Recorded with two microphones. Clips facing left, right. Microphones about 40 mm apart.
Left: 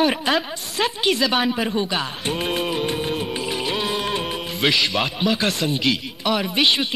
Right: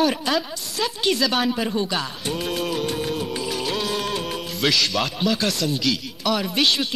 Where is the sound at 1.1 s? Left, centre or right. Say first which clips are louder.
Left 1 dB; centre.